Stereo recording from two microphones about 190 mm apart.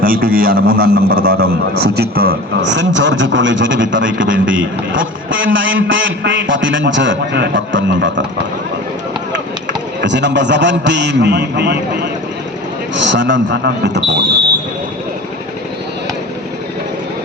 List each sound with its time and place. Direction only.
0.0 s a man's voice: 50° right (ahead or behind); by 8.2 s 75° right (ahead or behind)
10.0 s a man's voice: 65° right (ahead or behind)
13.0 s a man's voice: 70° right (ahead or behind)